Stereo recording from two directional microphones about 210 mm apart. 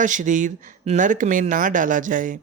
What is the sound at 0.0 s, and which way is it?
Speech, 35° right (ahead or behind).